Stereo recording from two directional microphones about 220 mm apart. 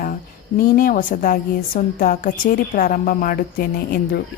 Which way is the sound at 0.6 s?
40° left (ahead or behind).